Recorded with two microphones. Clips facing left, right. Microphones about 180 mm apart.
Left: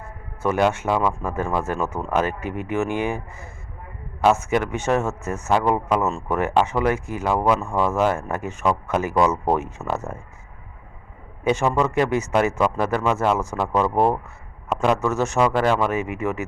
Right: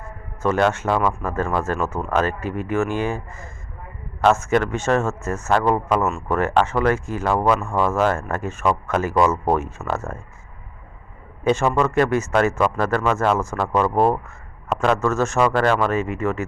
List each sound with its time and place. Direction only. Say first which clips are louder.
0.4 s speech: right 1 dB; 15° left (ahead or behind)
11.4 s speech: right 1 dB; 15° left (ahead or behind)